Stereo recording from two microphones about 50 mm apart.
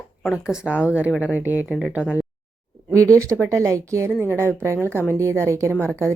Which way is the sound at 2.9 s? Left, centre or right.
Right.